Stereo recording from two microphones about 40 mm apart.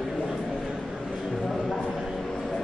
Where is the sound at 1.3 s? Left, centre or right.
Centre.